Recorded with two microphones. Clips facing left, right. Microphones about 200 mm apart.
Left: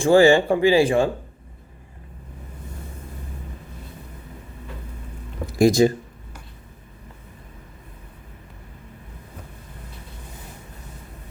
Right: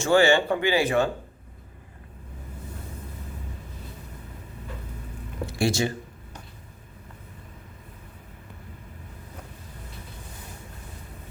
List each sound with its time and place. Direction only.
0.0 s speech: 30° left (ahead or behind)
5.5 s speech: 35° left (ahead or behind)